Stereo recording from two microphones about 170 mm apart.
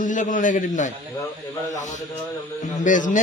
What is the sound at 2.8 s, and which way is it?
Speech, 50° left (ahead or behind).